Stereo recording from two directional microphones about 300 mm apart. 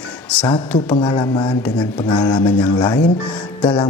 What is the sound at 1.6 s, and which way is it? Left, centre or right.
Speech, centre.